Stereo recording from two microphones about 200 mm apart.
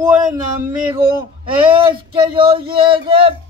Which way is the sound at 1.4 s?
25° right (ahead or behind).